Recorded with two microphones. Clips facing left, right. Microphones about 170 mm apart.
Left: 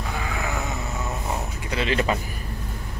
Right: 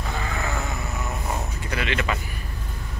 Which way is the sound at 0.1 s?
10° left (ahead or behind).